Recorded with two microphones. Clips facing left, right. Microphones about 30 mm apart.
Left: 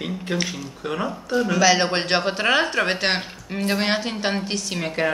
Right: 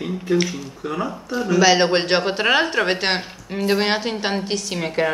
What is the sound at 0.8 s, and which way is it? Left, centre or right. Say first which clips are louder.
Speech: right 1 dB; left.